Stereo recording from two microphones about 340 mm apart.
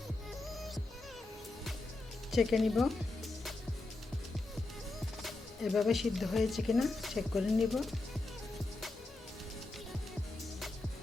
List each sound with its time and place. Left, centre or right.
0.4 s music: centre
2.3 s speech: centre
5.2 s speech: centre